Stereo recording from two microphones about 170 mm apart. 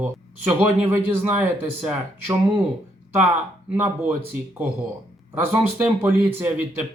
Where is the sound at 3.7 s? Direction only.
10° right (ahead or behind).